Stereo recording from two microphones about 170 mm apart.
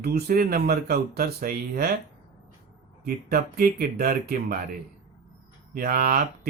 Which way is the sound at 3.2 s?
65° right (ahead or behind).